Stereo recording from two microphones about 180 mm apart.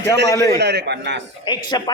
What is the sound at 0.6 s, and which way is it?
Speech, 70° right (ahead or behind).